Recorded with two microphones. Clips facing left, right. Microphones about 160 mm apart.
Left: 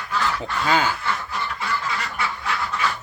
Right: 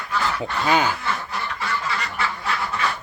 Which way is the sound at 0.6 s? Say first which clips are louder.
Right 1 dB; 20° right (ahead or behind).